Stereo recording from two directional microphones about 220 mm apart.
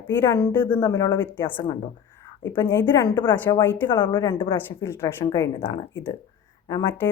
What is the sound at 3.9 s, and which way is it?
A woman's voice, 20° left (ahead or behind).